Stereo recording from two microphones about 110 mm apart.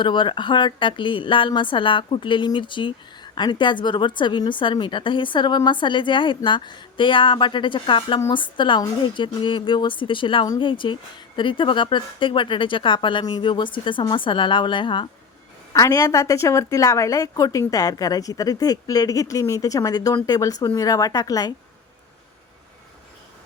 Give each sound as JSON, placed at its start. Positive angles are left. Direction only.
{"t": 0.0, "sound": "a woman's voice", "side_deg": 45}
{"t": 15.7, "sound": "a woman's voice", "side_deg": 30}